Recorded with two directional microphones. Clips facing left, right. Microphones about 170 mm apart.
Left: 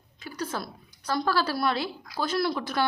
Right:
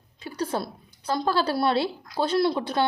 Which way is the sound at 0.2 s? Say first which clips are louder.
Right 4 dB; 30° right (ahead or behind).